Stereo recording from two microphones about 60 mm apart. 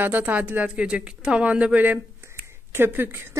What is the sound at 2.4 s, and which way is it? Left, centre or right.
Speech, right.